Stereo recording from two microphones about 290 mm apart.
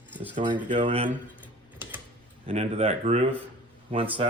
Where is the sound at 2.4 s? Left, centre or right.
Right.